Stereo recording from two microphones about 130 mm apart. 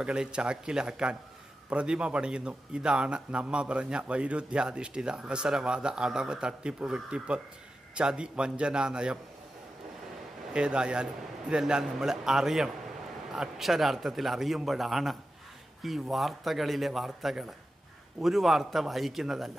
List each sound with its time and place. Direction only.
0.0 s a man's voice: 5° right (ahead or behind)
10.5 s a man's voice: 5° right (ahead or behind)